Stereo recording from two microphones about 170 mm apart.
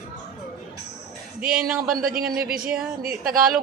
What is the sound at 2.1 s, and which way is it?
Speech, 60° right (ahead or behind).